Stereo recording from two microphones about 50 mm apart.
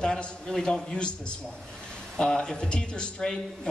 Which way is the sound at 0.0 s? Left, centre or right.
Centre.